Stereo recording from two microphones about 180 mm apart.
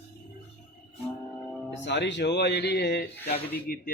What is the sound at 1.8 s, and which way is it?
Speech, 75° left (ahead or behind).